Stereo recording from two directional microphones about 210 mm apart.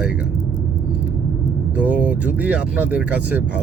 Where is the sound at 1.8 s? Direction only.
5° right (ahead or behind).